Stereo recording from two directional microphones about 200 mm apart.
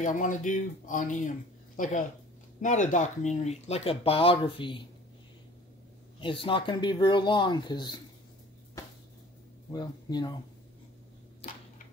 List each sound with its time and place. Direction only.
0.0 s speech: 40° left (ahead or behind)
6.2 s speech: 25° left (ahead or behind)
9.7 s speech: 20° left (ahead or behind)